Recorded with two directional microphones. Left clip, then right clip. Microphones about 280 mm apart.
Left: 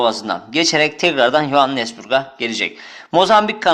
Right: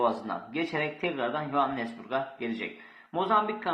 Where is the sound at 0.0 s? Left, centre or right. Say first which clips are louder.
Left 11 dB; left.